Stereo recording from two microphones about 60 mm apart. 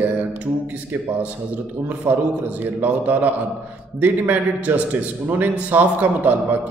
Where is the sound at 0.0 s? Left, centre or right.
Right.